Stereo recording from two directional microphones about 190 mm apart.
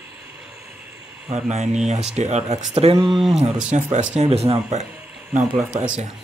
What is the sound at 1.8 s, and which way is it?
Speech, 35° right (ahead or behind).